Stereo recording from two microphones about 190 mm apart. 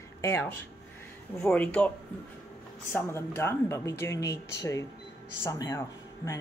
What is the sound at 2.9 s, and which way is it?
Speech, 15° left (ahead or behind).